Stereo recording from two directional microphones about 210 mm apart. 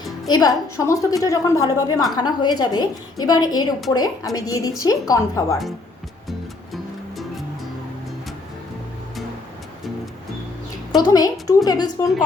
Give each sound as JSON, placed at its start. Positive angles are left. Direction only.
{"t": 0.3, "sound": "a woman's voice", "side_deg": 15}
{"t": 10.9, "sound": "a woman's voice", "side_deg": 20}